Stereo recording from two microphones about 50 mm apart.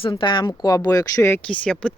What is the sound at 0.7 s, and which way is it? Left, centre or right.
Speech, left.